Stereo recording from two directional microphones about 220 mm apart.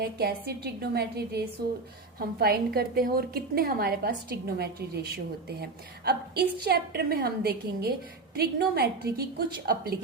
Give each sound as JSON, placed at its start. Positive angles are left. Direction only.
{"t": 0.0, "sound": "a woman's voice", "side_deg": -45}
{"t": 6.7, "sound": "a woman's voice", "side_deg": -45}